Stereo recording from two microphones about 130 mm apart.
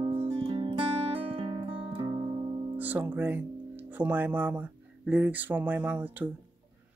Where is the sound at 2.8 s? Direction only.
15° right (ahead or behind).